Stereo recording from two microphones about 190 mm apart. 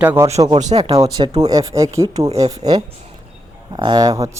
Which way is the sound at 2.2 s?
30° right (ahead or behind).